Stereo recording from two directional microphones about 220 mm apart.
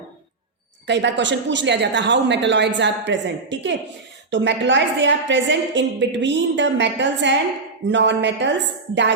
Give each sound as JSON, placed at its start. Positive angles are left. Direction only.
{"t": 0.9, "sound": "a woman's voice", "side_deg": -50}